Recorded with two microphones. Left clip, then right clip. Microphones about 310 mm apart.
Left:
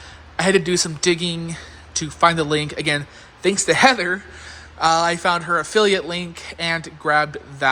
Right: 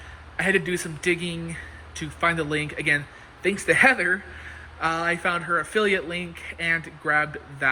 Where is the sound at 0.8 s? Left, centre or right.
Centre.